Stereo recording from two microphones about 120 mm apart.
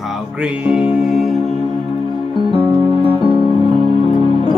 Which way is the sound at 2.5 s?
45° right (ahead or behind).